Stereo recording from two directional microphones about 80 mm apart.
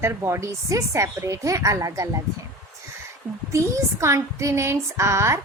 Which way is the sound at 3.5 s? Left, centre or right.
Right.